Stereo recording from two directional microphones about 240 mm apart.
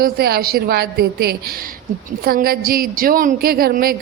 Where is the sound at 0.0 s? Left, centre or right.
Right.